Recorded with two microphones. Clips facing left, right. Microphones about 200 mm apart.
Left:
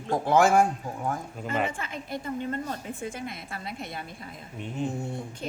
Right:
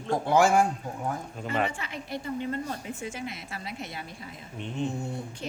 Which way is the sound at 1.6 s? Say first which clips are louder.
Left 1 dB; 50° left (ahead or behind).